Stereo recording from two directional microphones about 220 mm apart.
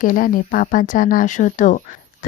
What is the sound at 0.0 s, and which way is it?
Speech, 40° left (ahead or behind).